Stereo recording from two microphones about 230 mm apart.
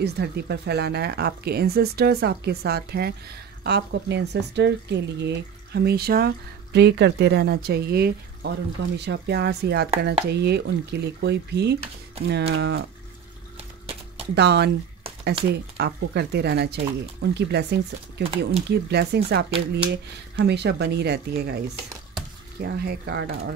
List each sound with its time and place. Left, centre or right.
0.0 s speech: right
13.6 s a sound: right
14.3 s speech: right
22.6 s speech: right